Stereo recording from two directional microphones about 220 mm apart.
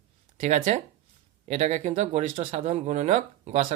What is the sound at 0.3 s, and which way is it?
Speech, 30° right (ahead or behind).